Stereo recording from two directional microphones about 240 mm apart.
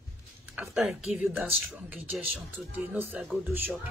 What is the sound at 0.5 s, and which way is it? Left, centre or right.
Speech, centre.